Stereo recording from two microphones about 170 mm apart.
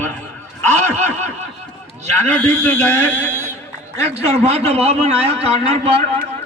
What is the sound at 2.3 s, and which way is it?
A man's voice, 10° left (ahead or behind).